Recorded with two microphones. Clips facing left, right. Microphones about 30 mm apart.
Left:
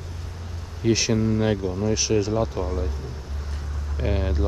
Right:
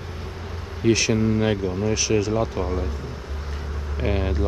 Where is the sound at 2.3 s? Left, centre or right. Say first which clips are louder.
Right 1 dB; centre.